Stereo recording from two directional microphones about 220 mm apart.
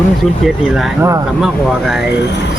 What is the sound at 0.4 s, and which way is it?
Speech, centre (ahead or behind).